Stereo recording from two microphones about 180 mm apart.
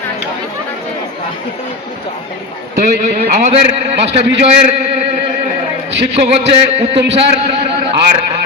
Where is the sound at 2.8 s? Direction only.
40° right (ahead or behind).